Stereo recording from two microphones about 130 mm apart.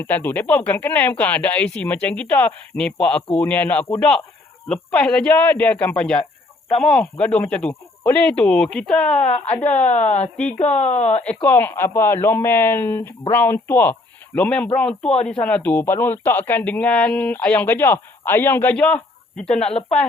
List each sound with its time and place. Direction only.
0.0 s a man's voice: 15° left (ahead or behind)
9.3 s speech: 55° left (ahead or behind)
9.6 s speech: 10° left (ahead or behind)
10.3 s speech: 65° left (ahead or behind)
11.4 s speech: 15° left (ahead or behind)